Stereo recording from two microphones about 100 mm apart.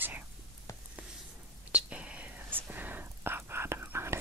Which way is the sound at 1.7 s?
10° right (ahead or behind).